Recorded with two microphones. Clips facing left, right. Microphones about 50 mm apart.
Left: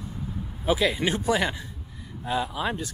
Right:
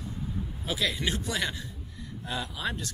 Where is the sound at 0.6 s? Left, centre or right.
Centre.